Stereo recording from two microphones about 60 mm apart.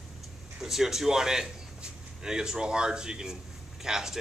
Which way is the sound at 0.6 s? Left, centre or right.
Centre.